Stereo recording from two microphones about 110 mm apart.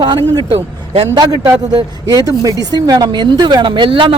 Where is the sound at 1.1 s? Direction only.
40° right (ahead or behind).